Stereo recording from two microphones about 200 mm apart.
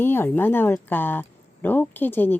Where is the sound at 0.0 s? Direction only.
10° left (ahead or behind).